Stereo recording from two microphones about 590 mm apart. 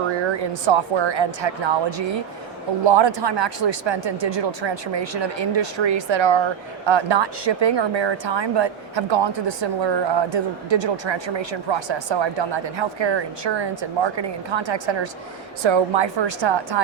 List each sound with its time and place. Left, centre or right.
0.6 s a woman's voice: right